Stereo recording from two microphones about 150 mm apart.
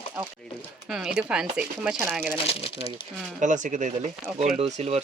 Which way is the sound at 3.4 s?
55° right (ahead or behind).